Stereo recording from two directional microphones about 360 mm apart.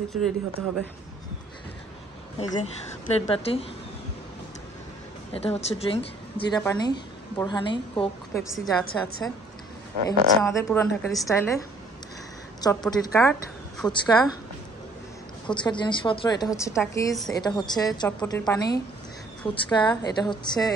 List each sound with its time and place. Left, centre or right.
0.1 s speech: centre
2.3 s a woman's voice: centre
5.3 s a woman's voice: centre
12.6 s a woman's voice: centre
15.4 s a woman's voice: centre